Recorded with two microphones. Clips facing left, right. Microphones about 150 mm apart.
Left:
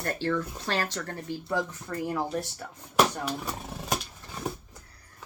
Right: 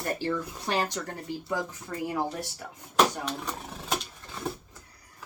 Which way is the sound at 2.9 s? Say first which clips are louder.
Even; 10° left (ahead or behind).